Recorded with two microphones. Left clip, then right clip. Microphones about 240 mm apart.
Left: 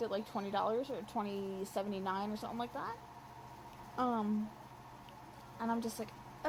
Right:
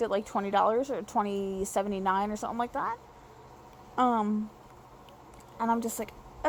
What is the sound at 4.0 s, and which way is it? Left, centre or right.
Speech, right.